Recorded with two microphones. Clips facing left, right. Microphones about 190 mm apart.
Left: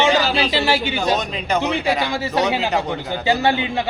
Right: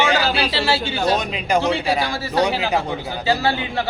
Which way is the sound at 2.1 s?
20° left (ahead or behind).